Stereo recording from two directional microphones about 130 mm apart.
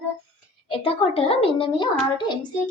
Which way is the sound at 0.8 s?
45° left (ahead or behind).